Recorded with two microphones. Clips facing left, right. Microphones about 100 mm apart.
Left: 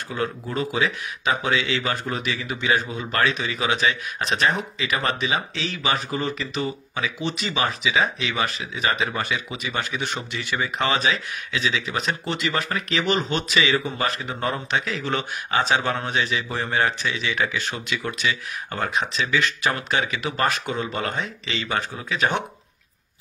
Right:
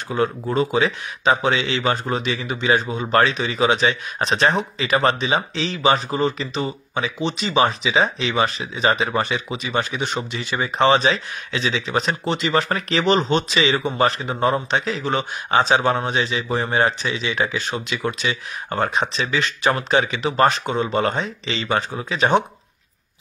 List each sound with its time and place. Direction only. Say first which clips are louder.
0.1 s speech: right 6 dB; 25° right (ahead or behind)
10.8 s speech: right 8 dB; 30° right (ahead or behind)
18.7 s speech: right 4 dB; 30° right (ahead or behind)